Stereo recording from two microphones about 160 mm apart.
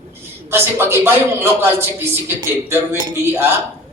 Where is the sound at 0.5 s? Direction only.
15° right (ahead or behind).